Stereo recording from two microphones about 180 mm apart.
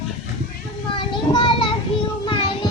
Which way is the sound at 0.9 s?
30° left (ahead or behind).